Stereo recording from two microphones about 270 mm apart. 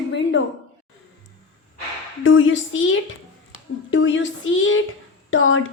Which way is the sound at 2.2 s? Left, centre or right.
Left.